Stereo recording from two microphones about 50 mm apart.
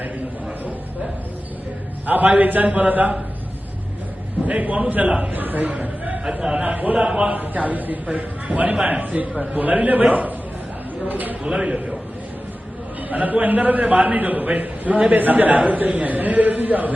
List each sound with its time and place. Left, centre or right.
2.0 s a man's voice: right
4.4 s a man's voice: right
6.9 s a man's voice: centre
11.1 s a man's voice: right
11.4 s a man's voice: centre
13.1 s a man's voice: right